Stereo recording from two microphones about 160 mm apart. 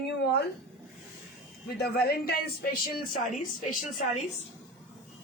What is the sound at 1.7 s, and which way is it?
A woman's voice, 80° left.